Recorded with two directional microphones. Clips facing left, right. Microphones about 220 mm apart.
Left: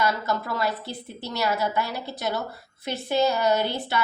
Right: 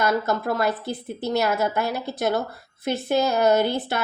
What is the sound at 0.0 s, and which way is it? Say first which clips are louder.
A woman's voice: right 4 dB; 50° right (ahead or behind).